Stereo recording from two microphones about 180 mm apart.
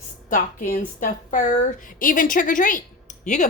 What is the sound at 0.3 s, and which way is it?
A woman's voice, 50° left (ahead or behind).